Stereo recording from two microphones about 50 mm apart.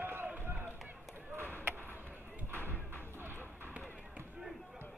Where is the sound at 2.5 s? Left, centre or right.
Left.